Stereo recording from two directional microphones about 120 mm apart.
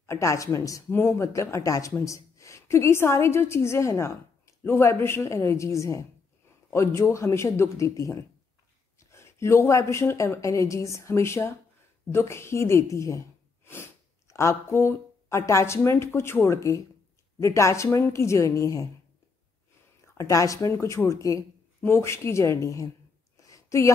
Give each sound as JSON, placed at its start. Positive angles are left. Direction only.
{"t": 0.0, "sound": "a woman's voice", "side_deg": 25}
{"t": 20.2, "sound": "speech", "side_deg": 25}
{"t": 23.3, "sound": "a sound", "side_deg": 25}